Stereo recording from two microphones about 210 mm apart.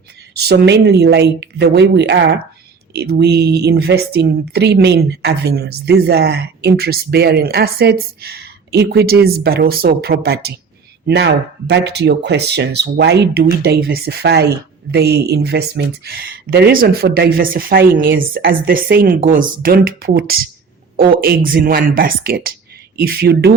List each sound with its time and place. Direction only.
0.4 s speech: 55° right (ahead or behind)